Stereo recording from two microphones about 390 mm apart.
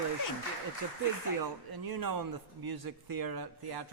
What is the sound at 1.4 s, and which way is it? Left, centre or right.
Speech, right.